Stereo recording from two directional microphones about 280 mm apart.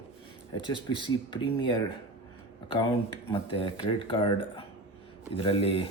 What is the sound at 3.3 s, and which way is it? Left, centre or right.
Speech, centre.